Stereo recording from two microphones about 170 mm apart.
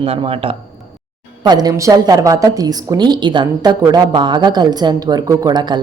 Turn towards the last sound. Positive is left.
turn(degrees=-25)  # may be behind; listen again after turning